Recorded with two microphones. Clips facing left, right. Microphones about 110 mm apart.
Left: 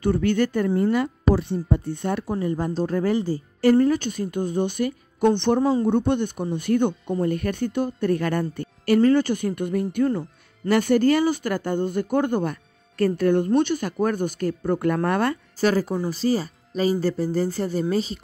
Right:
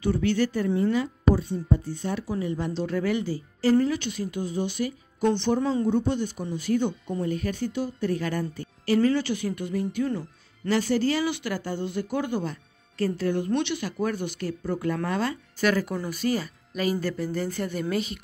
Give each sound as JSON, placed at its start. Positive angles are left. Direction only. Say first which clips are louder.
{"t": 0.0, "sound": "speech", "louder": "left 3 dB", "side_deg": 50}
{"t": 0.7, "sound": "speech", "louder": "left 3 dB", "side_deg": 40}
{"t": 1.3, "sound": "speech", "louder": "left 2 dB", "side_deg": 70}
{"t": 5.6, "sound": "speech", "louder": "left 5 dB", "side_deg": 35}
{"t": 5.9, "sound": "speech", "louder": "left 4 dB", "side_deg": 60}
{"t": 13.5, "sound": "speech", "louder": "left 6 dB", "side_deg": 45}
{"t": 15.6, "sound": "speech", "louder": "left 3 dB", "side_deg": 35}